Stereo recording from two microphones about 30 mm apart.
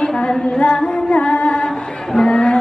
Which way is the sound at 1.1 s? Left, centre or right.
Left.